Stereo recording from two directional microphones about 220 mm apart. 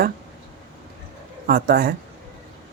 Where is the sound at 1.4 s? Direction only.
45° right (ahead or behind).